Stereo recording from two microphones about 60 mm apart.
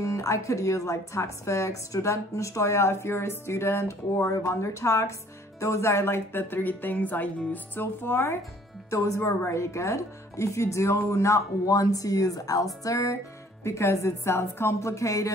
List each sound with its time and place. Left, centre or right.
0.0 s speech: left
8.9 s speech: left
12.8 s speech: left
13.7 s speech: left